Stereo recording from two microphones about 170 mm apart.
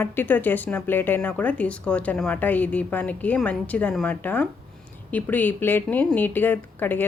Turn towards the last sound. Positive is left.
turn(degrees=10)  # may be behind; listen again after turning